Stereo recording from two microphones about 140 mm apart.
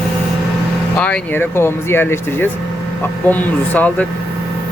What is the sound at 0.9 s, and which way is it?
Speech, 10° left (ahead or behind).